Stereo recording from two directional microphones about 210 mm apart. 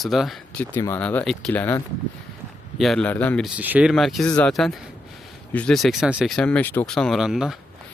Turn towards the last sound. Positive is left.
turn(degrees=0)  # may be behind; listen again after turning